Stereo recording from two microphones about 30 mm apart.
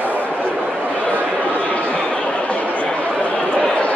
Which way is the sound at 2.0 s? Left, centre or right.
Left.